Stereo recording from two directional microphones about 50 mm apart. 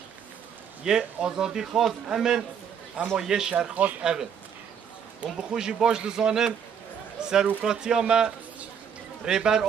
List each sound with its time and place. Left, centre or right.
0.8 s a man's voice: centre